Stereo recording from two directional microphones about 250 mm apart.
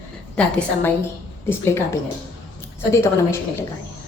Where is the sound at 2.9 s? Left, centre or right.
Centre.